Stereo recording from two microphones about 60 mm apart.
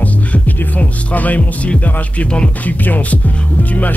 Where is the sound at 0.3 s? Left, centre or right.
Left.